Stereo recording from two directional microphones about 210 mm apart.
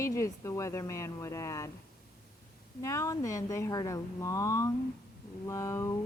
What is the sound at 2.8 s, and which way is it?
Speech, 15° left (ahead or behind).